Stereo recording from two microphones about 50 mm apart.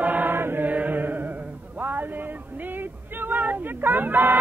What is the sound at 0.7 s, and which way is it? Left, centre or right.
Music, right.